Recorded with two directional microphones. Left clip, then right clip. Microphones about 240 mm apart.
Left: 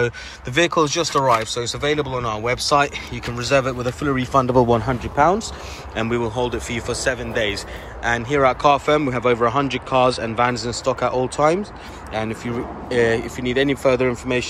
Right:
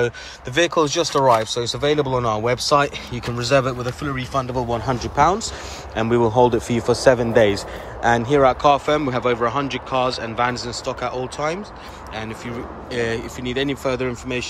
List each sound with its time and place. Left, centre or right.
0.6 s speech: centre
5.9 s speech: centre
6.2 s speech: centre